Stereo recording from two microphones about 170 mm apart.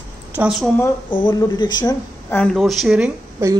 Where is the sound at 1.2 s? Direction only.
25° left (ahead or behind).